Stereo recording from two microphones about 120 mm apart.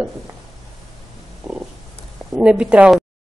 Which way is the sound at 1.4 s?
5° right (ahead or behind).